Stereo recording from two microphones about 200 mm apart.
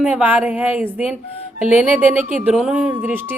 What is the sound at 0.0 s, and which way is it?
A woman's voice, 10° right (ahead or behind).